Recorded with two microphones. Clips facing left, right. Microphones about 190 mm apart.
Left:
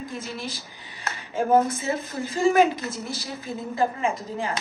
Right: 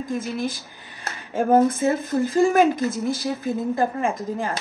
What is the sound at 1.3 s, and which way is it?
A woman's voice, 50° right (ahead or behind).